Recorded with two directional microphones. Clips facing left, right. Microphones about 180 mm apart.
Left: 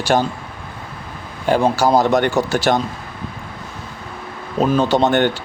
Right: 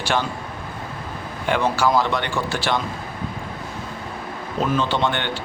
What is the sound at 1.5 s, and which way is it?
Speech, 40° left (ahead or behind).